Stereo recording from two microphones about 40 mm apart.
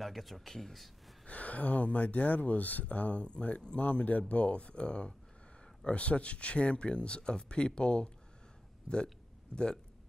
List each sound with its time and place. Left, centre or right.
0.0 s speech: centre
1.2 s speech: left
3.7 s speech: left